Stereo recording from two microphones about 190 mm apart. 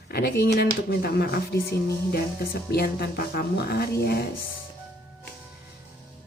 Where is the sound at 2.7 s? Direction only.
55° left (ahead or behind).